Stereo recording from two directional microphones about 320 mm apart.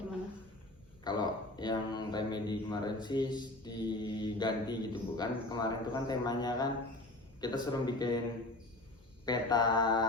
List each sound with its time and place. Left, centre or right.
1.0 s speech: centre
9.2 s speech: centre